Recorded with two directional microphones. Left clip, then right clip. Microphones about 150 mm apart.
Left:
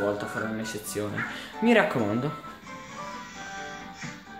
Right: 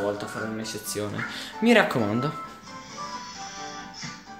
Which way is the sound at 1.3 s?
30° right (ahead or behind).